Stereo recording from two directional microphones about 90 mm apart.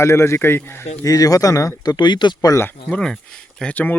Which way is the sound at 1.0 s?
40° left (ahead or behind).